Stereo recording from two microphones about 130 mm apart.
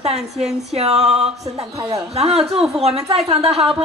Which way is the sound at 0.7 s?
55° right (ahead or behind).